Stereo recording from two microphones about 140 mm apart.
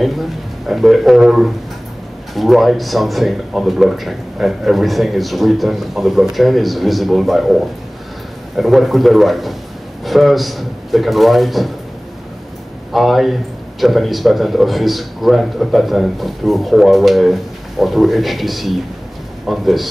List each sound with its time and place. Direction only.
0.0 s a man's voice: centre (ahead or behind)
8.5 s a man's voice: centre (ahead or behind)
12.9 s a man's voice: centre (ahead or behind)